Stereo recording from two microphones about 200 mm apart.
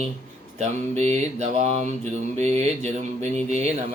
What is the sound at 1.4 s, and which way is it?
Mantra, 35° right (ahead or behind).